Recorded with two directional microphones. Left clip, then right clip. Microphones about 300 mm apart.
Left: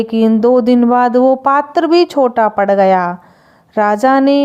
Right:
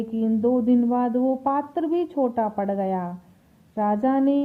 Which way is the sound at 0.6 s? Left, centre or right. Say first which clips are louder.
Left 12 dB; left.